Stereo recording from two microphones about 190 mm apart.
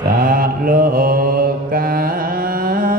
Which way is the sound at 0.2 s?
50° right (ahead or behind).